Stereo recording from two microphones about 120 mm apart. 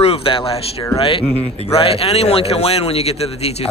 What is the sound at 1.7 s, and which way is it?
A man's voice, 55° left (ahead or behind).